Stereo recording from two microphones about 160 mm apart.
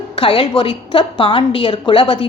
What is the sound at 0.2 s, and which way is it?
A woman's voice, 30° left (ahead or behind).